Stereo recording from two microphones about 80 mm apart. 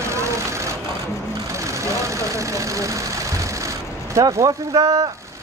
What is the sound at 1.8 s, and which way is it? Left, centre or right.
Speech, right.